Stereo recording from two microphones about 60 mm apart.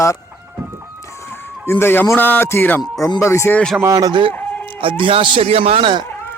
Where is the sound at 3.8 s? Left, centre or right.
Right.